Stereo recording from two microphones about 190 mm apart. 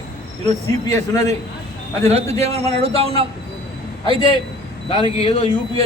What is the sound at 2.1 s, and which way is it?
A man's voice, 35° right (ahead or behind).